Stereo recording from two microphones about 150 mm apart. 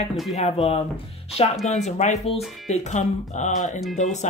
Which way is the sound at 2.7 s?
50° left (ahead or behind).